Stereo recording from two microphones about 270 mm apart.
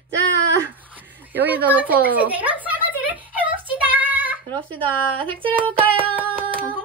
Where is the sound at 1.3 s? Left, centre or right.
Centre.